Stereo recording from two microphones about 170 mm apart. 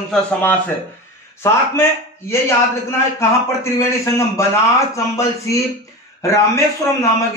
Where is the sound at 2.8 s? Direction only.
15° left (ahead or behind).